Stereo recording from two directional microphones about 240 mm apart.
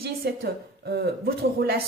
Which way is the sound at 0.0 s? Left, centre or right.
Right.